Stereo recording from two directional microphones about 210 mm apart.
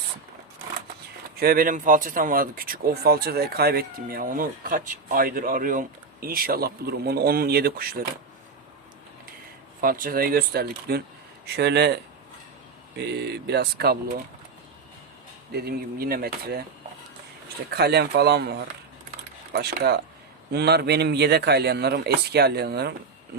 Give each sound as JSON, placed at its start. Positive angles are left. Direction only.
{"t": 1.4, "sound": "speech", "side_deg": -45}
{"t": 9.8, "sound": "speech", "side_deg": -45}
{"t": 13.0, "sound": "speech", "side_deg": -50}
{"t": 15.5, "sound": "speech", "side_deg": -45}
{"t": 17.7, "sound": "speech", "side_deg": -50}